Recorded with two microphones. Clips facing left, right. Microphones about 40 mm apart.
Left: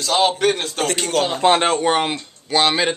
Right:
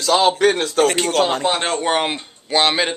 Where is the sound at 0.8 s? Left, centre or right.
Centre.